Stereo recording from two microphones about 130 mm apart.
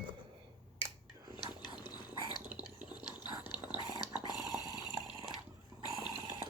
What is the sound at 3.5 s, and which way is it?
Dog, 10° right (ahead or behind).